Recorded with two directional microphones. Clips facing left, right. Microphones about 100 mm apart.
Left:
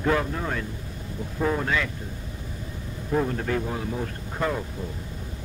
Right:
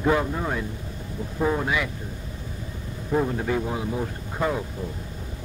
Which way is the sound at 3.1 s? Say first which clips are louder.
Right 1 dB; 10° right (ahead or behind).